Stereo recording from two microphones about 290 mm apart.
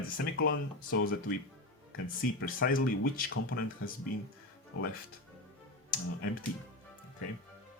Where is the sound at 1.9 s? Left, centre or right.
Left.